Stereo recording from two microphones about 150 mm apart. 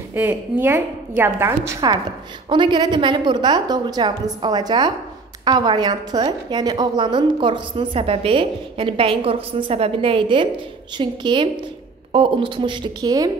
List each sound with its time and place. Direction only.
0.1 s a woman's voice: 15° right (ahead or behind)